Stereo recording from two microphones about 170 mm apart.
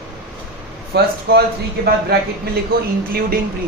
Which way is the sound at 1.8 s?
65° right (ahead or behind).